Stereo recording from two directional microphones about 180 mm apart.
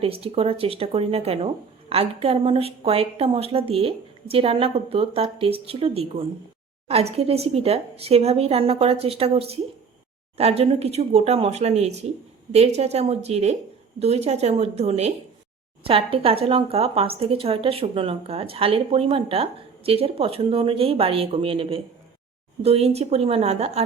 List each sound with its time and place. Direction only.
0.0 s a woman's voice: 30° right (ahead or behind)